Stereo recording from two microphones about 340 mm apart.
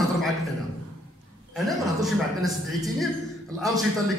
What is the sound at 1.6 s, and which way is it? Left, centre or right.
A man's voice, centre.